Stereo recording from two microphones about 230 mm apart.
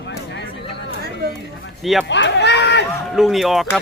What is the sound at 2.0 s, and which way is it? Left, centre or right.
Run, left.